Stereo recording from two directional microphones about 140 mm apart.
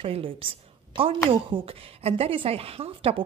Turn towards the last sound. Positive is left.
turn(degrees=-40)  # may be behind; listen again after turning